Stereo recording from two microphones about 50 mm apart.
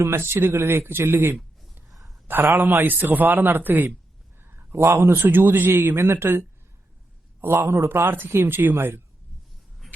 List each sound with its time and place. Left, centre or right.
0.0 s speech: right
1.9 s a sound: centre
2.2 s a man's voice: right
4.4 s a sound: right
5.2 s speech: right
7.4 s a man's voice: right
7.9 s speech: right